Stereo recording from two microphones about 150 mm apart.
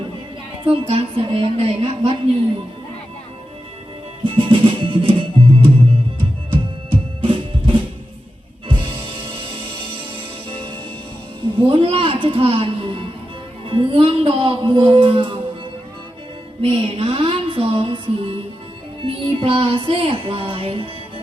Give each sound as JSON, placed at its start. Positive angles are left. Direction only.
{"t": 0.6, "sound": "a woman's voice", "side_deg": -40}
{"t": 4.4, "sound": "music", "side_deg": -35}
{"t": 11.6, "sound": "music", "side_deg": -40}
{"t": 16.6, "sound": "music", "side_deg": -40}